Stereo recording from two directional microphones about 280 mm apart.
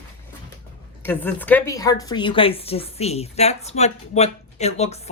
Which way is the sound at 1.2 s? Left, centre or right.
Centre.